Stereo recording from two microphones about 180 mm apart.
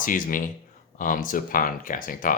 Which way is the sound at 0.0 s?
50° left (ahead or behind).